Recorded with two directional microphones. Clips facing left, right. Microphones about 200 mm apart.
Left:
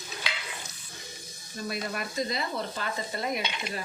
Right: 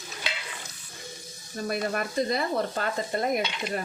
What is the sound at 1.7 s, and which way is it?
Stir, 50° right (ahead or behind).